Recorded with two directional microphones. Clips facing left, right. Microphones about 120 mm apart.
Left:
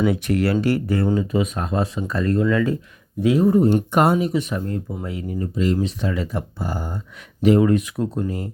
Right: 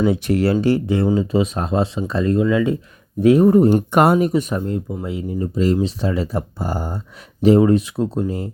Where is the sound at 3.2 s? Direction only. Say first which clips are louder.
Right 4 dB; 55° right (ahead or behind).